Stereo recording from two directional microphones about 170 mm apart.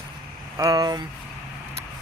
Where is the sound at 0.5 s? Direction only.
20° right (ahead or behind).